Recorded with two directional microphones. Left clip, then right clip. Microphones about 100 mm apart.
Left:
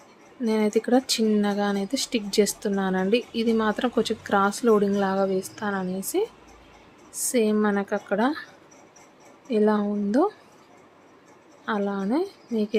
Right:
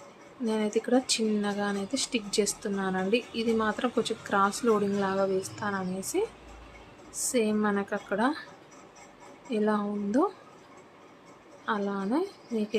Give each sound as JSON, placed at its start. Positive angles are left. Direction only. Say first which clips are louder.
{"t": 0.4, "sound": "speech", "louder": "left 5 dB", "side_deg": 70}
{"t": 7.3, "sound": "a woman's voice", "louder": "left 5 dB", "side_deg": 55}
{"t": 9.5, "sound": "a woman's voice", "louder": "left 6 dB", "side_deg": 60}
{"t": 11.6, "sound": "a woman's voice", "louder": "left 3 dB", "side_deg": 60}